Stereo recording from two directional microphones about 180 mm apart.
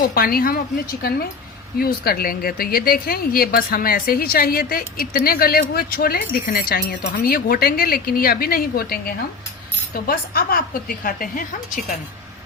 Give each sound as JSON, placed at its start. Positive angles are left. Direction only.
{"t": 0.0, "sound": "a woman's voice", "side_deg": 55}
{"t": 1.8, "sound": "a woman's voice", "side_deg": 55}